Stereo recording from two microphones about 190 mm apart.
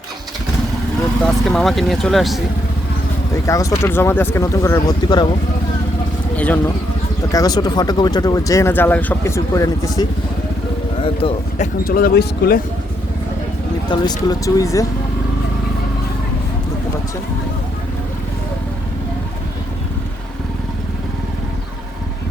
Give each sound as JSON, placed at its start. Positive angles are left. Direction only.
{"t": 1.2, "sound": "speech", "side_deg": 0}
{"t": 3.4, "sound": "speech", "side_deg": 15}
{"t": 6.3, "sound": "speech", "side_deg": 10}
{"t": 7.3, "sound": "speech", "side_deg": 20}
{"t": 11.0, "sound": "speech", "side_deg": 35}
{"t": 13.9, "sound": "speech", "side_deg": 20}